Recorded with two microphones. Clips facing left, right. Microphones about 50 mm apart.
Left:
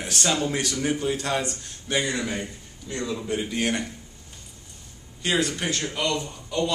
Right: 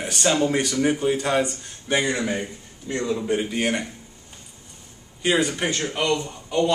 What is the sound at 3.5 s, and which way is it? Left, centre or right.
Speech, centre.